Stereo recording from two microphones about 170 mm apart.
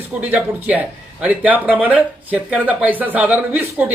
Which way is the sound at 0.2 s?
10° right (ahead or behind).